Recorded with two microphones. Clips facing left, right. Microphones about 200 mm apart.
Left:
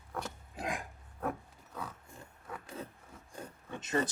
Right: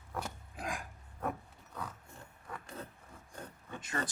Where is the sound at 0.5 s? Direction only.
25° left (ahead or behind).